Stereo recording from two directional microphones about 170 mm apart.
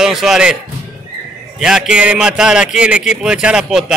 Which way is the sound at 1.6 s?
5° right (ahead or behind).